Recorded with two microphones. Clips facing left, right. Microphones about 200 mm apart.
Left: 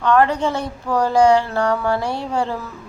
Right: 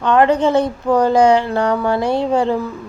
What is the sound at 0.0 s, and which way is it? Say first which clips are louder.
A woman's voice: right 3 dB; 20° right (ahead or behind).